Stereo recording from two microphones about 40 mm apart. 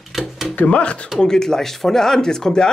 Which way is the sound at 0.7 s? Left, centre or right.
Left.